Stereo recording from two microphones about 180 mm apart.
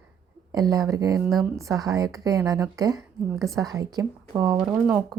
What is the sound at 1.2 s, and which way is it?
Speech, centre (ahead or behind).